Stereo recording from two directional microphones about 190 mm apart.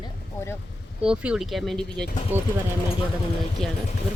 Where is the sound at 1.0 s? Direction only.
5° right (ahead or behind).